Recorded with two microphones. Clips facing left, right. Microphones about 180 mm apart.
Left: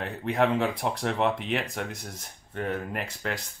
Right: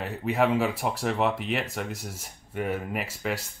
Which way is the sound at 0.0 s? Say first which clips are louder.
Even; 5° right (ahead or behind).